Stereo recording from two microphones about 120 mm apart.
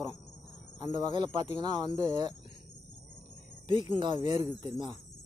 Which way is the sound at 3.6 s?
40° right (ahead or behind).